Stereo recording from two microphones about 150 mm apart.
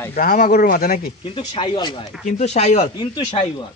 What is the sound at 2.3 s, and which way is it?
Speech, 50° left (ahead or behind).